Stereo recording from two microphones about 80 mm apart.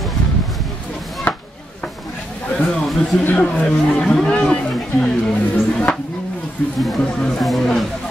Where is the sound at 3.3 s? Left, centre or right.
Centre.